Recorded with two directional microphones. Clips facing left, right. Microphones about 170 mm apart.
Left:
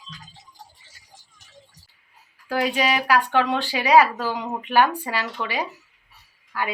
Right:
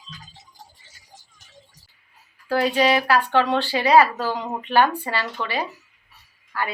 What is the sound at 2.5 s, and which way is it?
Speech, 10° left (ahead or behind).